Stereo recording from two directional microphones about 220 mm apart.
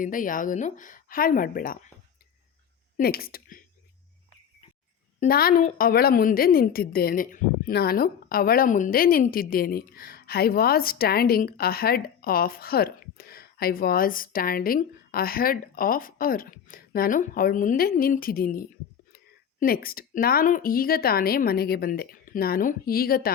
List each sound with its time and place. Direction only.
0.0 s a woman's voice: 40° left (ahead or behind)
3.0 s speech: 45° left (ahead or behind)
5.2 s a woman's voice: 40° left (ahead or behind)